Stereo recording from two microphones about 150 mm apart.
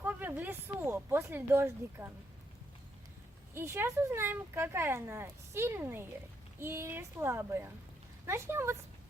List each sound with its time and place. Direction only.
0.0 s speech: 10° right (ahead or behind)
3.5 s speech: 15° right (ahead or behind)